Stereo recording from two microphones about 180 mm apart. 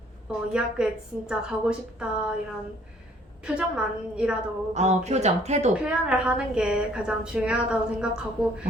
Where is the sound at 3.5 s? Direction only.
5° right (ahead or behind).